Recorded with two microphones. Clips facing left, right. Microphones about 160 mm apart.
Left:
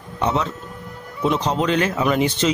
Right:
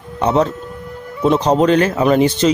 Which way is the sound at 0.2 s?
40° right (ahead or behind).